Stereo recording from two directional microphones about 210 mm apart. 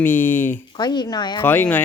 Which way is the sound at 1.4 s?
10° left (ahead or behind).